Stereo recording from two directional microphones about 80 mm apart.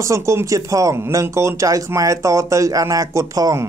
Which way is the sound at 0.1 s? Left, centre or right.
Right.